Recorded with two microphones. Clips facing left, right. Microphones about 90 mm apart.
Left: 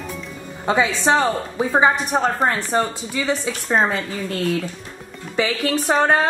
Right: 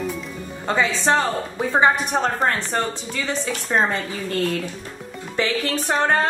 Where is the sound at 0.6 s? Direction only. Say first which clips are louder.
Left 2 dB; 15° left (ahead or behind).